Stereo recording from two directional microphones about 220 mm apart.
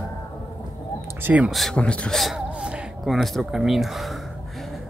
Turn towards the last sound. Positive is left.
turn(degrees=0)  # may be behind; listen again after turning